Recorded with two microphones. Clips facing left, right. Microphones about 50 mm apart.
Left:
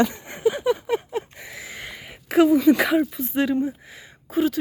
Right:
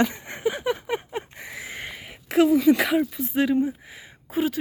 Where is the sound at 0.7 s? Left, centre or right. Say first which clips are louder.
Left 4 dB; right.